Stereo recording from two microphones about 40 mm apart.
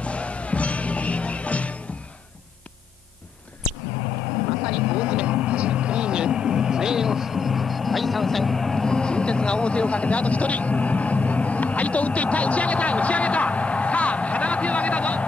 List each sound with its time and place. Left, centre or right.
0.0 s music: left
4.5 s vehicle: centre
4.7 s vehicle: right; by 15.2 s left